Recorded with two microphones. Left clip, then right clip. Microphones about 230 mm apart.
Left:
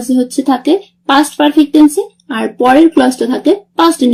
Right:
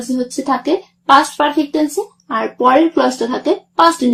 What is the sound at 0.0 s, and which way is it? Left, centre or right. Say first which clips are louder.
Speech: left 6 dB; left.